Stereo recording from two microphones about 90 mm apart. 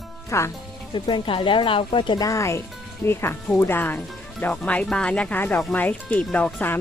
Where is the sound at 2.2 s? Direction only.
35° left (ahead or behind); by 6.8 s 20° left (ahead or behind).